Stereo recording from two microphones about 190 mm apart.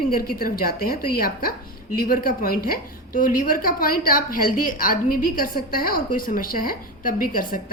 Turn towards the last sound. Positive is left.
turn(degrees=45)  # may be behind; listen again after turning